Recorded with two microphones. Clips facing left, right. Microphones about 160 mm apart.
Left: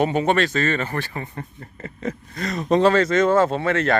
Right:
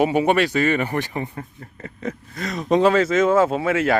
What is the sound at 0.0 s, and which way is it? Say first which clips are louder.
Speech: right 2 dB; 10° right (ahead or behind).